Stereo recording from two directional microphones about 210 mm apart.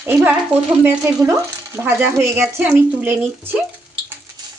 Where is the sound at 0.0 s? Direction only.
10° right (ahead or behind).